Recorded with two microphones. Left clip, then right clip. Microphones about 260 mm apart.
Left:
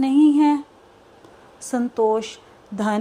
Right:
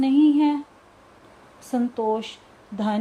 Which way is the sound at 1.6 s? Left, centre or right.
Centre.